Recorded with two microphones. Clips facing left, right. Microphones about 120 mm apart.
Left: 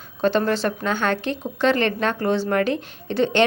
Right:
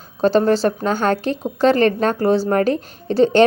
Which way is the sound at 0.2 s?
35° right (ahead or behind).